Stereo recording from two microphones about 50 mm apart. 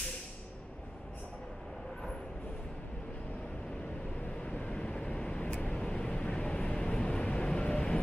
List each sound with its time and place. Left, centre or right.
4.4 s vehicle: left